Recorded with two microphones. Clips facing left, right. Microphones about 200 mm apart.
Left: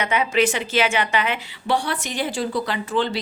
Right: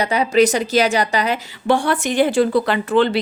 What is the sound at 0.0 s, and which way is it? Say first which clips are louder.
A woman's voice: right 5 dB; 35° right (ahead or behind).